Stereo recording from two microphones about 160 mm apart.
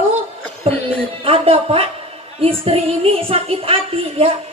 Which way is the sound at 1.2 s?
35° right (ahead or behind).